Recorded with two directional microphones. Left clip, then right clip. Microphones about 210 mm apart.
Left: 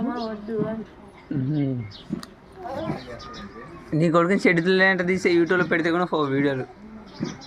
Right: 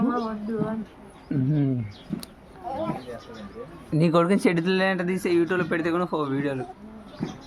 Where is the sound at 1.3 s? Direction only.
15° right (ahead or behind).